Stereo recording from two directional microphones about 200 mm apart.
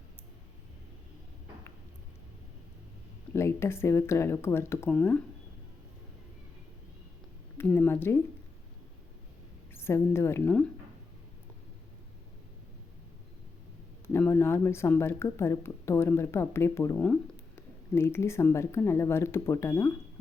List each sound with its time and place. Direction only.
3.3 s speech: 10° left (ahead or behind)
7.6 s speech: 10° left (ahead or behind)
9.7 s speech: 10° left (ahead or behind)
14.1 s speech: 10° left (ahead or behind)